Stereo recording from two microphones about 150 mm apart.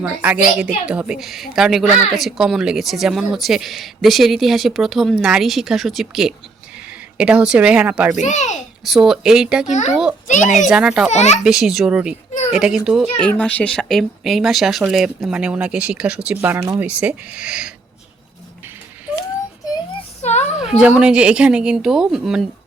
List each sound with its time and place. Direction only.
0.0 s a woman's voice: 10° right (ahead or behind)
8.1 s a child's voice: 50° left (ahead or behind)
8.8 s a woman's voice: centre (ahead or behind)
10.2 s a child's voice: 55° left (ahead or behind)
10.7 s a woman's voice: 5° right (ahead or behind)
11.1 s a child's voice: 50° left (ahead or behind)
11.4 s a woman's voice: 5° right (ahead or behind)
13.1 s a woman's voice: 5° left (ahead or behind); by 16.8 s 20° right (ahead or behind)
16.8 s speech: 10° right (ahead or behind)
20.0 s a sound: 50° left (ahead or behind)
20.7 s a woman's voice: 5° right (ahead or behind)